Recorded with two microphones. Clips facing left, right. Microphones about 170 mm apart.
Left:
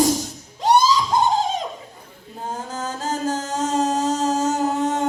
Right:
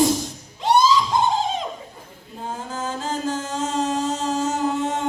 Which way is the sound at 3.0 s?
40° left (ahead or behind).